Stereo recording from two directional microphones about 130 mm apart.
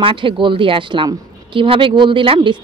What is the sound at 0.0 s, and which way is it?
A woman's voice, 40° right (ahead or behind).